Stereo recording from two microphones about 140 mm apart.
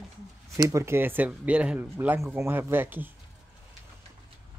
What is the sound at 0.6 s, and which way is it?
Speech, 25° right (ahead or behind).